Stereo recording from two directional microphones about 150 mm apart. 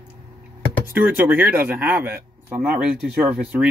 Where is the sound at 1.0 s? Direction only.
10° right (ahead or behind).